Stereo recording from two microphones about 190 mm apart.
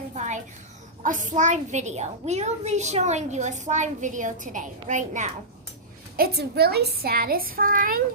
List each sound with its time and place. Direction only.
0.1 s a sound: 40° right (ahead or behind)
1.0 s a child's voice: 45° right (ahead or behind)
6.1 s a child's voice: 55° right (ahead or behind)